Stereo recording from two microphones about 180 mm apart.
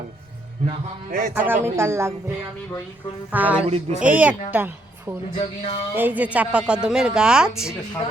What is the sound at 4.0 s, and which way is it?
Speech, 10° right (ahead or behind).